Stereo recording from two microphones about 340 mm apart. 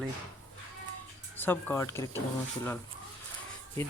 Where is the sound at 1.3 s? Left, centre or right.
Centre.